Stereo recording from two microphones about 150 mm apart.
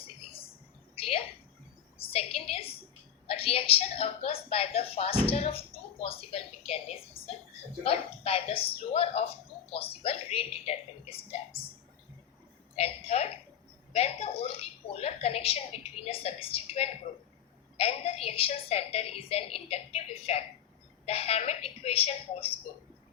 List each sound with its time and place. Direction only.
0.9 s a sound: 40° left (ahead or behind)
3.2 s a woman's voice: 40° left (ahead or behind)
12.7 s a woman's voice: 40° left (ahead or behind)